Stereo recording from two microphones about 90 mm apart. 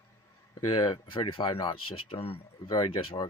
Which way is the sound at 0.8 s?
70° left (ahead or behind).